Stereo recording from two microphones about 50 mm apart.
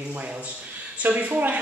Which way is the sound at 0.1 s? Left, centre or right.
Right.